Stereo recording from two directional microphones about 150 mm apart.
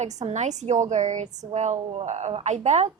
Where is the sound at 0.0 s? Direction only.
50° right (ahead or behind).